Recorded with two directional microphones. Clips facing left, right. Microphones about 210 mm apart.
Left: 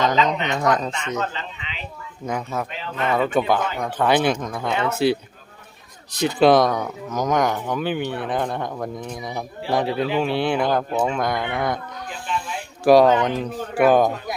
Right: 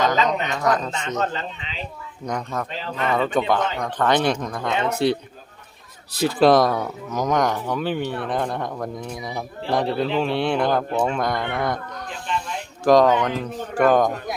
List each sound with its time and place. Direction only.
0.4 s speech: 25° left (ahead or behind)
0.9 s speech: 10° left (ahead or behind)
1.2 s speech: 40° right (ahead or behind)
2.2 s a man's voice: 5° left (ahead or behind)
4.7 s speech: 20° right (ahead or behind)
6.1 s a man's voice: centre (ahead or behind)
12.3 s a sound: 5° left (ahead or behind)
13.4 s speech: 10° left (ahead or behind)